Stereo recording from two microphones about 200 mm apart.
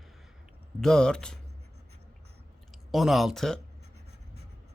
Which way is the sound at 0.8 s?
5° left (ahead or behind).